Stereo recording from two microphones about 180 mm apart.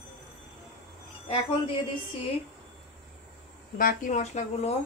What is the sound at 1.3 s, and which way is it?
Speech, 30° left (ahead or behind).